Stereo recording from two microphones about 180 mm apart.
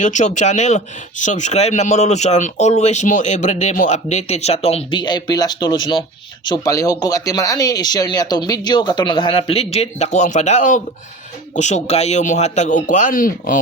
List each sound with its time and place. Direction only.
0.0 s speech: 40° left (ahead or behind)